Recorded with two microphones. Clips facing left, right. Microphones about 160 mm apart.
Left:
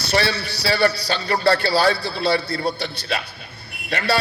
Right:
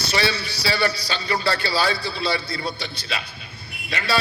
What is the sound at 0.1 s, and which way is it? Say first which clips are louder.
A man's voice: left 3 dB; 60° left (ahead or behind).